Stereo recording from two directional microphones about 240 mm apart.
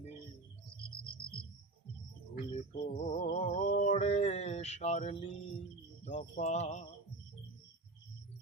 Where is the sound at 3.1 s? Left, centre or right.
Left.